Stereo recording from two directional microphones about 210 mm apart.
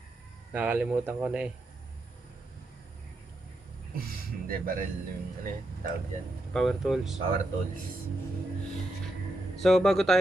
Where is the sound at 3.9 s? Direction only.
45° right (ahead or behind).